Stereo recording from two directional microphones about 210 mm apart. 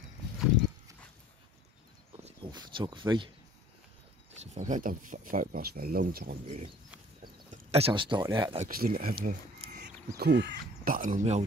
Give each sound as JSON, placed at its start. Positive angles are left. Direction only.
{"t": 2.2, "sound": "speech", "side_deg": -20}
{"t": 4.4, "sound": "speech", "side_deg": -35}
{"t": 6.4, "sound": "speech", "side_deg": -30}
{"t": 8.6, "sound": "speech", "side_deg": -45}